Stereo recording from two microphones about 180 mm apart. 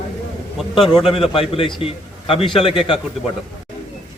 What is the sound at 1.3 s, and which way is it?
A man's voice, 30° left (ahead or behind).